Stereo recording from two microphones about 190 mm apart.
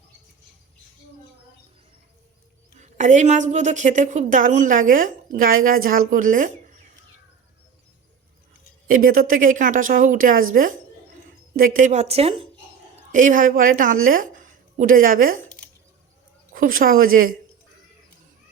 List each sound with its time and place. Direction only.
2.7 s a woman's voice: 40° right (ahead or behind)
8.9 s speech: 50° right (ahead or behind)
11.8 s a woman's voice: 40° right (ahead or behind)
13.1 s a woman's voice: 45° right (ahead or behind)
16.5 s speech: 50° right (ahead or behind)